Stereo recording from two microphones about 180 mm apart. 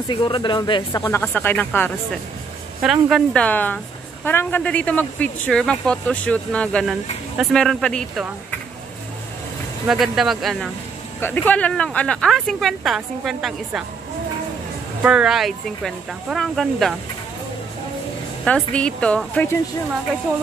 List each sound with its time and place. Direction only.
0.1 s speech: 25° left (ahead or behind)
1.0 s a woman's voice: 10° left (ahead or behind)
2.8 s a woman's voice: 5° right (ahead or behind)
9.8 s speech: centre (ahead or behind)
15.0 s speech: 5° right (ahead or behind)
18.4 s a woman's voice: 5° left (ahead or behind)